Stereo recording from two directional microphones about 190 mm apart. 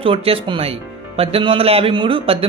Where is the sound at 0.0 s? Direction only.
30° right (ahead or behind).